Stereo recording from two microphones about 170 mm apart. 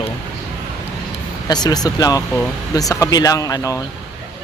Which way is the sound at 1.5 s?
25° left (ahead or behind).